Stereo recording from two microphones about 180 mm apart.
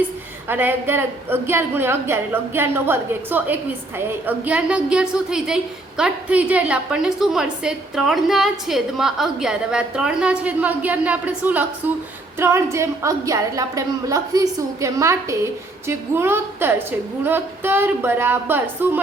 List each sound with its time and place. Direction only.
0.4 s a woman's voice: 10° right (ahead or behind)